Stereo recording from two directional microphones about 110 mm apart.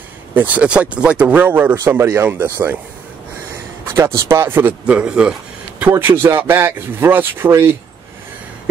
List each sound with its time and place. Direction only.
0.3 s speech: 15° right (ahead or behind)
3.9 s speech: 25° right (ahead or behind)